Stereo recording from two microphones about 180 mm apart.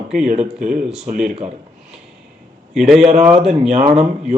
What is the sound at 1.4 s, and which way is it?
Speech, 5° right (ahead or behind).